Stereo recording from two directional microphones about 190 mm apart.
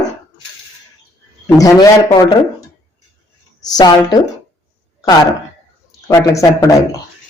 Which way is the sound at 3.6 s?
20° left (ahead or behind).